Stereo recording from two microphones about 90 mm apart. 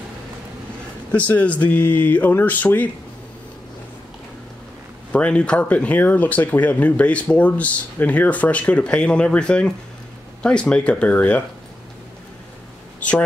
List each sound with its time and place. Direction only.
1.1 s speech: 15° left (ahead or behind)
5.1 s speech: 15° left (ahead or behind)